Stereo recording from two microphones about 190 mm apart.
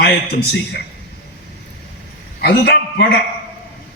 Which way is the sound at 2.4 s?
60° left (ahead or behind).